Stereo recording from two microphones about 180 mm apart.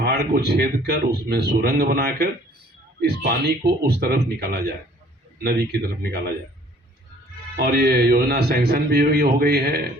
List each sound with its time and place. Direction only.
0.0 s a man's voice: 65° right (ahead or behind)
7.6 s a man's voice: 65° right (ahead or behind)